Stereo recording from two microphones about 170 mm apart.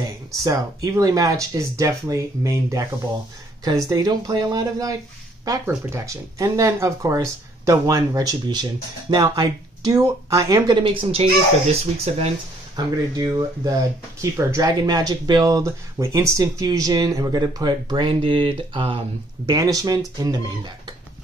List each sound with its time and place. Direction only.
0.0 s speech: 20° right (ahead or behind); by 12.2 s 40° right (ahead or behind)
12.7 s speech: 20° right (ahead or behind)
19.5 s speech: 20° right (ahead or behind)